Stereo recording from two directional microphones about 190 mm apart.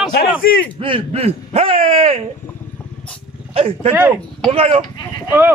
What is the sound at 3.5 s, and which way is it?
Speech, 30° right (ahead or behind).